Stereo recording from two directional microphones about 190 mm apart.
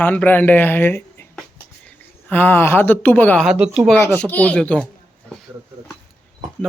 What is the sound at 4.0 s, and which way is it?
Speech, 10° left (ahead or behind).